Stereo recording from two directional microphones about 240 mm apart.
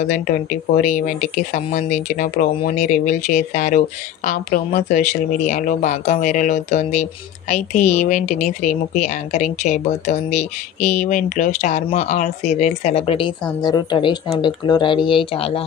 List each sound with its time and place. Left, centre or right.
0.1 s speech: left